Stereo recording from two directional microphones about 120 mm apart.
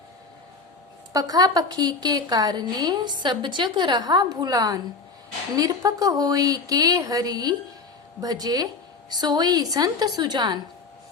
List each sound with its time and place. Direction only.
1.1 s a woman's voice: 30° right (ahead or behind)